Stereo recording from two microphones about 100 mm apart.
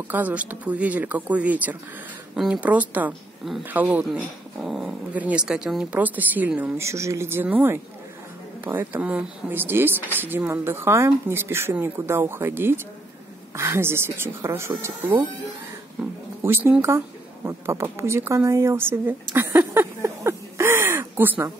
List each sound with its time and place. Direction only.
0.1 s speech: 15° right (ahead or behind)
4.6 s dog: centre (ahead or behind)
5.1 s speech: 15° right (ahead or behind)
6.8 s speech: 30° right (ahead or behind)